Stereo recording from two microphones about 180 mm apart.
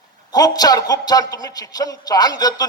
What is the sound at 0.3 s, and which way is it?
A man's voice, 20° left (ahead or behind).